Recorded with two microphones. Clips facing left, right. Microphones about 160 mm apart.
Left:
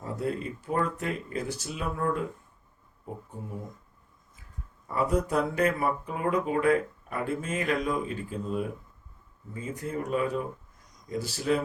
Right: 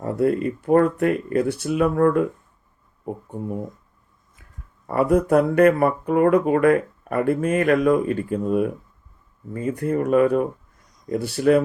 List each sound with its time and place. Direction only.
0.0 s speech: 60° right (ahead or behind)
3.3 s speech: 65° right (ahead or behind)
4.9 s speech: 60° right (ahead or behind)